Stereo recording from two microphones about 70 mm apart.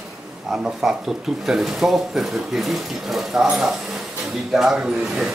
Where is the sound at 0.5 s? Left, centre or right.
Centre.